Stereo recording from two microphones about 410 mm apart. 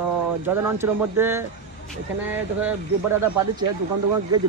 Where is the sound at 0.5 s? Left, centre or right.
Centre.